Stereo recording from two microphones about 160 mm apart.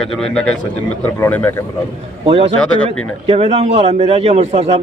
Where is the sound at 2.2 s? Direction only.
35° right (ahead or behind).